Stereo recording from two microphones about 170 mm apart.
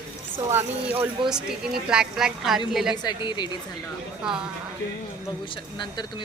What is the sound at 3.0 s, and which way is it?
Speech, 25° left (ahead or behind).